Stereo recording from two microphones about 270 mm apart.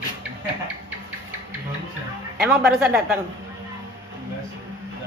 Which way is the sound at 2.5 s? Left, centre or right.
Centre.